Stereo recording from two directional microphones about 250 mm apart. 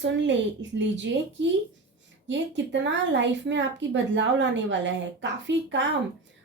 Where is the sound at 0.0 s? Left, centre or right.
Right.